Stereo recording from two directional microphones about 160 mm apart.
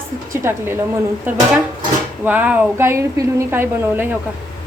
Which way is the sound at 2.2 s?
10° right (ahead or behind).